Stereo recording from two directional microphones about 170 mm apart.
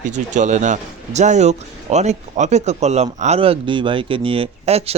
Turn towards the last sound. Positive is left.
turn(degrees=-35)  # may be behind; listen again after turning